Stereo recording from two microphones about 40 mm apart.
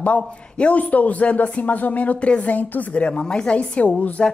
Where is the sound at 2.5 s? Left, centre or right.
Left.